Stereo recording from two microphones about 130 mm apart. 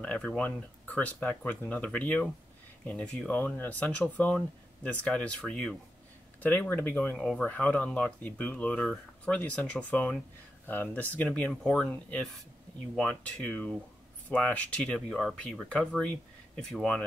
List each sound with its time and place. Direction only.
0.0 s speech: 10° left (ahead or behind)
7.2 s speech: centre (ahead or behind)